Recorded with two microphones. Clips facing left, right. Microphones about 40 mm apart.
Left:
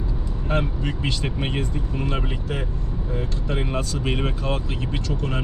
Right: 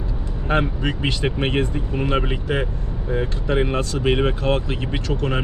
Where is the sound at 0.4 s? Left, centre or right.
Right.